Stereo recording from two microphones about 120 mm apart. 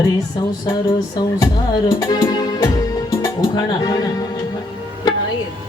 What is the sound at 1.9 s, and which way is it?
Speech, 35° left (ahead or behind).